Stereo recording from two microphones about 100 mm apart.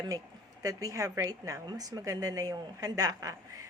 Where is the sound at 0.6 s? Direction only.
35° right (ahead or behind).